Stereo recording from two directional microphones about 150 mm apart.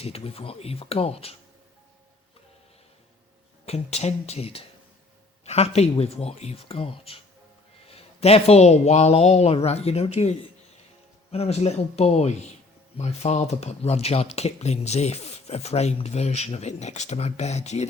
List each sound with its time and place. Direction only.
0.0 s speech: 40° left (ahead or behind)
3.7 s speech: 45° left (ahead or behind)